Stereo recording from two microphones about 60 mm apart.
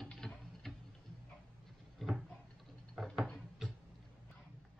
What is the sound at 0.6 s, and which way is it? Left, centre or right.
Tick-tock, centre.